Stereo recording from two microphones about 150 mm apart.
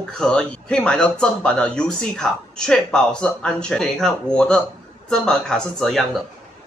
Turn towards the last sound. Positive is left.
turn(degrees=5)  # may be behind; listen again after turning